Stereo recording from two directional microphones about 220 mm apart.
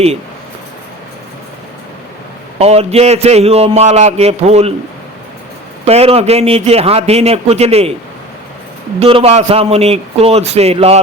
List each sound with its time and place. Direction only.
2.6 s a man's voice: 30° right (ahead or behind)
5.8 s a man's voice: 30° right (ahead or behind)
9.0 s a man's voice: 25° right (ahead or behind)